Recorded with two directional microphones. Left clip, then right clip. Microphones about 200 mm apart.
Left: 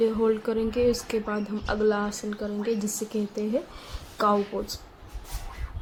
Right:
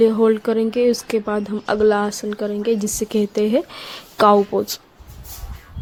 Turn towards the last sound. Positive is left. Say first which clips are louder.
# right 10 dB
turn(degrees=-45)  # may be behind; listen again after turning